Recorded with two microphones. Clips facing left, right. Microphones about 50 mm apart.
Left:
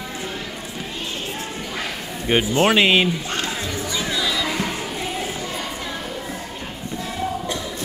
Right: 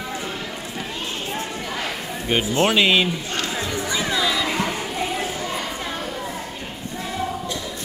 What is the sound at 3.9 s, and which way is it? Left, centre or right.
Music, centre.